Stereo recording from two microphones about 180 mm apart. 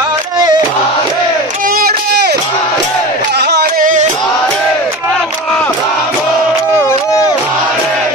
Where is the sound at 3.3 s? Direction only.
65° right (ahead or behind); by 4.1 s 45° right (ahead or behind).